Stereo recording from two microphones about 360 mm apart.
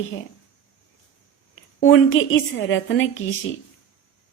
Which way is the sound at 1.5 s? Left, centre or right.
Left.